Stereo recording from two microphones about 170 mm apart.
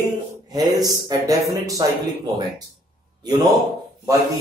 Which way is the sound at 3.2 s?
20° right (ahead or behind).